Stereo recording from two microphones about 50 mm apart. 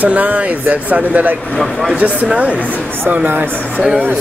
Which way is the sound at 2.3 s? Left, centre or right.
Right.